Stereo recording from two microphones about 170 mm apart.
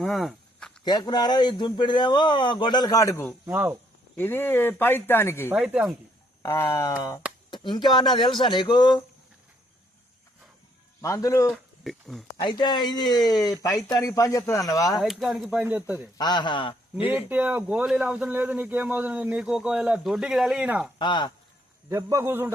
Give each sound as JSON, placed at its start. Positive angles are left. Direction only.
{"t": 0.0, "sound": "a sound", "side_deg": 0}
{"t": 0.9, "sound": "a man's voice", "side_deg": 25}
{"t": 3.4, "sound": "speech", "side_deg": -10}
{"t": 4.2, "sound": "speech", "side_deg": 10}
{"t": 5.5, "sound": "speech", "side_deg": -5}
{"t": 6.4, "sound": "a man's voice", "side_deg": 15}
{"t": 11.0, "sound": "a man's voice", "side_deg": 20}
{"t": 11.8, "sound": "speech", "side_deg": 0}
{"t": 12.4, "sound": "a man's voice", "side_deg": 25}
{"t": 15.0, "sound": "speech", "side_deg": 0}
{"t": 16.1, "sound": "a man's voice", "side_deg": 25}
{"t": 17.1, "sound": "speech", "side_deg": -10}
{"t": 21.0, "sound": "a man's voice", "side_deg": 25}
{"t": 21.8, "sound": "speech", "side_deg": -15}